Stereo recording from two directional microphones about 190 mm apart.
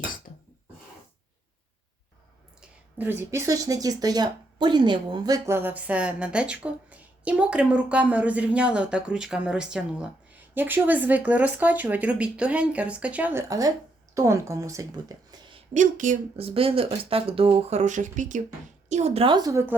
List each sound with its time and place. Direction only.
0.3 s a sound: 40° left (ahead or behind)
2.6 s speech: 10° right (ahead or behind)
15.7 s a woman's voice: 40° right (ahead or behind); by 19.7 s 15° right (ahead or behind)